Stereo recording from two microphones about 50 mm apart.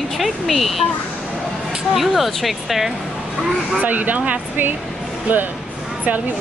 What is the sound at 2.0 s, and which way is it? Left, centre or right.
Speech, centre.